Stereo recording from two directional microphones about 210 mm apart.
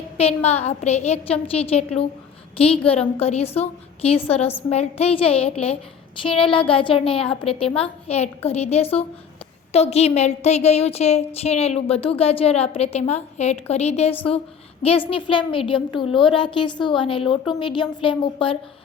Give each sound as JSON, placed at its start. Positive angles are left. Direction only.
{"t": 0.2, "sound": "a woman's voice", "side_deg": 30}